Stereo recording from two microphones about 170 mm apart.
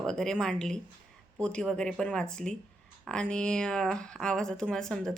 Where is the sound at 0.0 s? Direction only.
5° left (ahead or behind).